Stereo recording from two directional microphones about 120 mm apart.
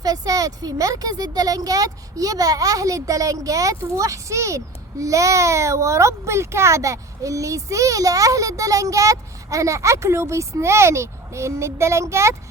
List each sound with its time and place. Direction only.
0.0 s speech: 30° right (ahead or behind)